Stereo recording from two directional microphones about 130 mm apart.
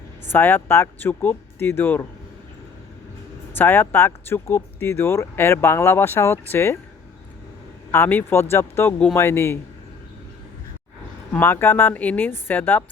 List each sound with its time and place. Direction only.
0.3 s speech: 15° left (ahead or behind)
3.6 s speech: 15° left (ahead or behind)
7.9 s speech: 15° left (ahead or behind)
11.3 s speech: 15° left (ahead or behind)